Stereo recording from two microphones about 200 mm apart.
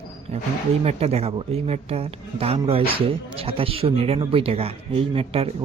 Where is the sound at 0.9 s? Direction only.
30° right (ahead or behind).